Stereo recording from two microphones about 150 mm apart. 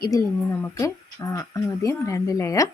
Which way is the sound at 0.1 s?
15° left (ahead or behind).